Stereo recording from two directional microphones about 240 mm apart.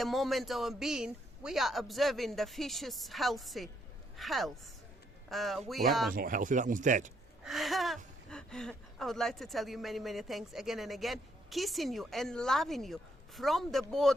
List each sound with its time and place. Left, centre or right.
0.0 s speech: centre
6.1 s speech: right
7.4 s speech: centre